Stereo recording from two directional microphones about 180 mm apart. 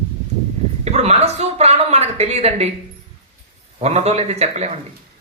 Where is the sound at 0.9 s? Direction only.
35° right (ahead or behind).